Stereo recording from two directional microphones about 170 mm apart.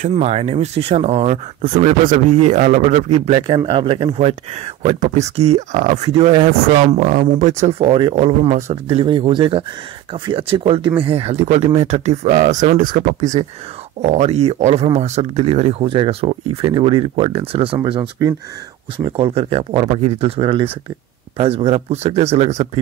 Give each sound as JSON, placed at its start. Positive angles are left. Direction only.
{"t": 0.0, "sound": "speech", "side_deg": -40}
{"t": 7.8, "sound": "speech", "side_deg": -35}